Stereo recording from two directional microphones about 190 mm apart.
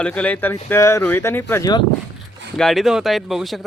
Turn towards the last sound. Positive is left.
turn(degrees=0)  # may be behind; listen again after turning